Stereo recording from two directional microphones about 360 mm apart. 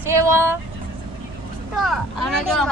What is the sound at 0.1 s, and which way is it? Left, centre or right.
Speech, centre.